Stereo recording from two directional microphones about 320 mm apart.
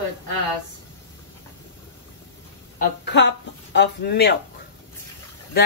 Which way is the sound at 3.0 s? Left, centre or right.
Left.